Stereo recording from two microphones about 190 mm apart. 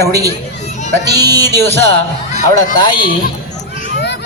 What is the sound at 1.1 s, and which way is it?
Music, 20° right (ahead or behind).